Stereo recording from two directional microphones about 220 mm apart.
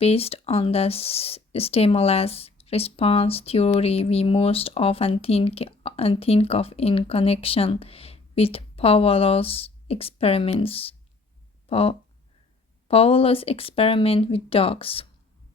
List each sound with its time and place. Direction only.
0.0 s speech: 25° left (ahead or behind)